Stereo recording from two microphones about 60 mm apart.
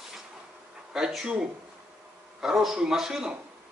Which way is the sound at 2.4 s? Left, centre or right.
Centre.